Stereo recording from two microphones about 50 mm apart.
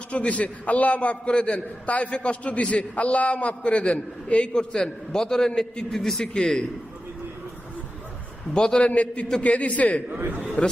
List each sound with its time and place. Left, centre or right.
0.1 s a man's voice: left
5.9 s a man's voice: centre
8.5 s a man's voice: centre
8.9 s a man's voice: left
10.2 s a man's voice: right